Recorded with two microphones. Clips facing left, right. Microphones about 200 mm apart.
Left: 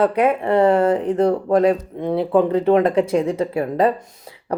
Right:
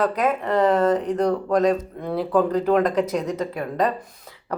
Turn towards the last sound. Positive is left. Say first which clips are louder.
# left 5 dB
turn(degrees=30)  # may be behind; listen again after turning